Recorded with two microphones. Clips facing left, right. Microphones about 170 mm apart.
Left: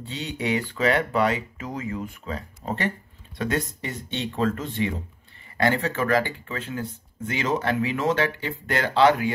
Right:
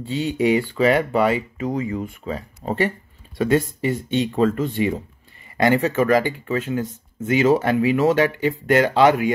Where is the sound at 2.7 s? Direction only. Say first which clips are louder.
Right 6 dB; 5° right (ahead or behind).